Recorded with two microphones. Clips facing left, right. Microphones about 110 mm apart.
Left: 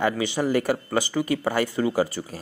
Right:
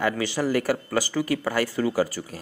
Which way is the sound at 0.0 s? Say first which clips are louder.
Left 1 dB; 20° left (ahead or behind).